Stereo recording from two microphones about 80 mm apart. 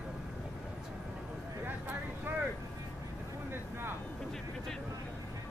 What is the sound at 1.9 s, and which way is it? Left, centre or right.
Vehicle, right.